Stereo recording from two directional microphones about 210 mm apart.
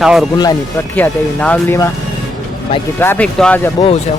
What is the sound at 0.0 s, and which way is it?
Speech, centre (ahead or behind).